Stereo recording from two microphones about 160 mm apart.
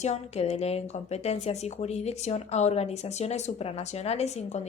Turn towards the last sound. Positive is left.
turn(degrees=45)  # may be behind; listen again after turning